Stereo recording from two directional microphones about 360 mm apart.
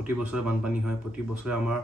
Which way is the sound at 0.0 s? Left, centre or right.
Centre.